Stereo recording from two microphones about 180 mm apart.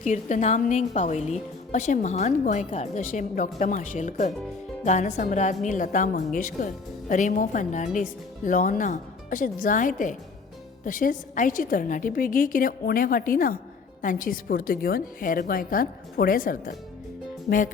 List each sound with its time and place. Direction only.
0.0 s a woman's voice: 45° left (ahead or behind)